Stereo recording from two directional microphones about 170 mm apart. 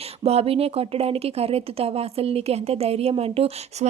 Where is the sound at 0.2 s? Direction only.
35° right (ahead or behind).